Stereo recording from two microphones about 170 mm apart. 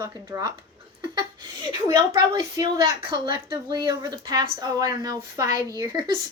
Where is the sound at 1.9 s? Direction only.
25° right (ahead or behind).